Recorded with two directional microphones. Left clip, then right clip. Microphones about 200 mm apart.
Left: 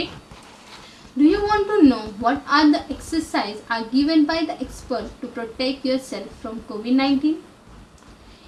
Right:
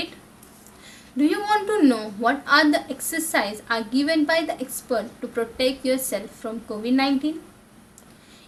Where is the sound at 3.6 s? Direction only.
40° right (ahead or behind).